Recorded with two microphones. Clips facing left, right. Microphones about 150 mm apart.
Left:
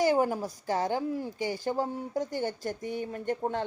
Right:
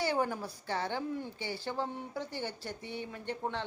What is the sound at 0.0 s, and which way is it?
A woman's voice, 40° left (ahead or behind).